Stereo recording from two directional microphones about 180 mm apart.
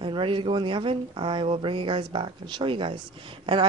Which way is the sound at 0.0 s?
30° right (ahead or behind).